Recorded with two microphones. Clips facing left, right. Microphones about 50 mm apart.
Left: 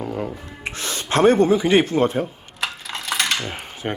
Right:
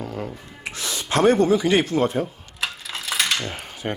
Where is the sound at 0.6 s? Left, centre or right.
Left.